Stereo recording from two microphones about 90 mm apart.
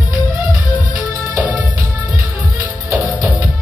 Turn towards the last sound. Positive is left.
turn(degrees=-20)  # may be behind; listen again after turning